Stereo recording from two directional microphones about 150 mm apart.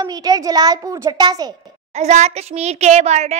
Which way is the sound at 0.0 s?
25° right (ahead or behind).